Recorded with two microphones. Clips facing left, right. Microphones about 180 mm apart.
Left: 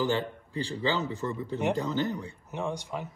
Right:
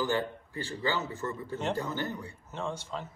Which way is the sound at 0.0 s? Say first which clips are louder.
Left 2 dB; 15° left (ahead or behind).